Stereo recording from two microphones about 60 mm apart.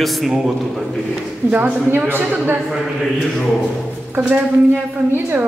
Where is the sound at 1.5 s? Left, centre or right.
Right.